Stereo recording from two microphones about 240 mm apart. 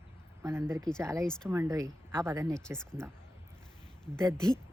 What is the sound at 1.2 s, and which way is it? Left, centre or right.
Speech, centre.